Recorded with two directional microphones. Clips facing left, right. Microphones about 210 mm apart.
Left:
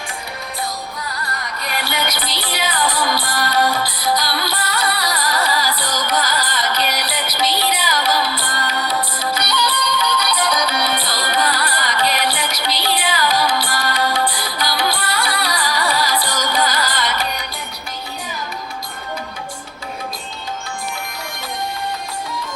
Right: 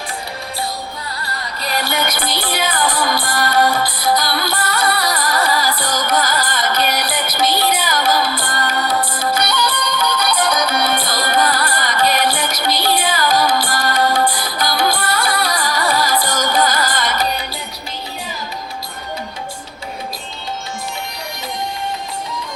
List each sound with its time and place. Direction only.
1.6 s music: 40° right (ahead or behind)